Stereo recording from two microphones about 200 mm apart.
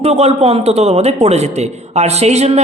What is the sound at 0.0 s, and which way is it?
A man's voice, 30° right (ahead or behind).